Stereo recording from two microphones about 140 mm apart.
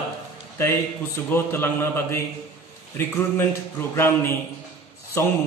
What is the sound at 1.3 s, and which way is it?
A man's voice, 15° left (ahead or behind).